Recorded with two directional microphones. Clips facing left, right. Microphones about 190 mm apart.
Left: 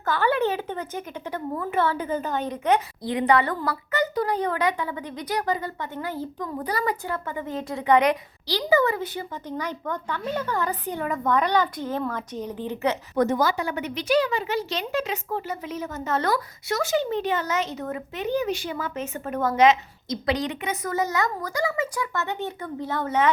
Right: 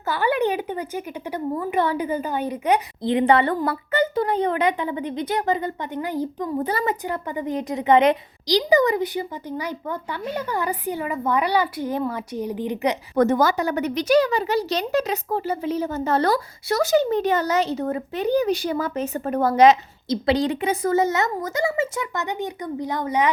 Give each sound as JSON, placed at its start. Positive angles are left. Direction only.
{"t": 0.0, "sound": "speech", "side_deg": -10}
{"t": 3.0, "sound": "speech", "side_deg": -25}
{"t": 13.1, "sound": "a woman's voice", "side_deg": -50}